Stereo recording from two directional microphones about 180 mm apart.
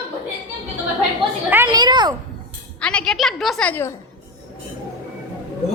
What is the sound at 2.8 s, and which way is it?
A woman's voice, 5° left (ahead or behind).